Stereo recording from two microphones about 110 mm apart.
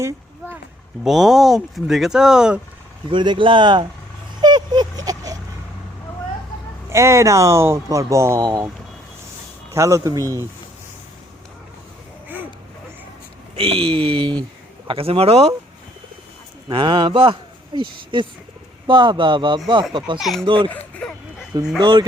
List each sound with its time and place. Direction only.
1.0 s speech: centre (ahead or behind)
3.1 s speech: 50° right (ahead or behind)
4.4 s a sound: 40° right (ahead or behind)
6.9 s speech: 25° right (ahead or behind)
9.7 s speech: 30° right (ahead or behind)
13.6 s speech: 60° right (ahead or behind)
16.6 s speech: 45° right (ahead or behind)
20.1 s speech: centre (ahead or behind)
20.4 s speech: 50° right (ahead or behind)
21.8 s speech: 45° right (ahead or behind)